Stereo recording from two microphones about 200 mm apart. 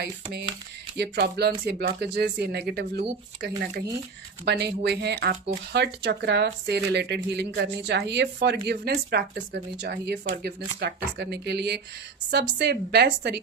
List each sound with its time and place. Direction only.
0.0 s speech: 55° right (ahead or behind)